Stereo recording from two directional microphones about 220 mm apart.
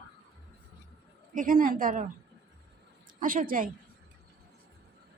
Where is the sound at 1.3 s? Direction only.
40° right (ahead or behind).